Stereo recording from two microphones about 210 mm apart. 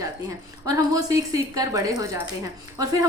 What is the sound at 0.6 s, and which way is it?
A woman's voice, 15° right (ahead or behind).